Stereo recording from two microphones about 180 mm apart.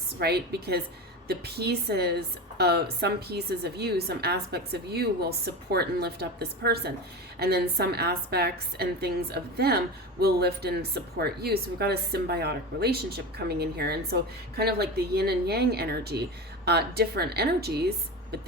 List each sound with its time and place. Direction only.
0.2 s a woman's voice: 65° right (ahead or behind)